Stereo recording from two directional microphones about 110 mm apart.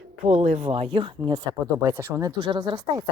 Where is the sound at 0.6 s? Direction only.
55° right (ahead or behind).